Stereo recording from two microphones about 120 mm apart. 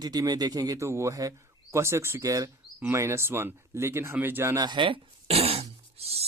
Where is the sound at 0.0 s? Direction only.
30° right (ahead or behind).